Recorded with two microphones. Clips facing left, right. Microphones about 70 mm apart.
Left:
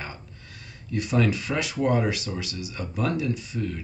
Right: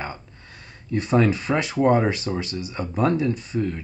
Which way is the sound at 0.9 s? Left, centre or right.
Right.